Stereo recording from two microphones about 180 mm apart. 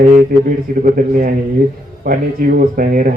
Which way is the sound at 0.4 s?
50° right (ahead or behind).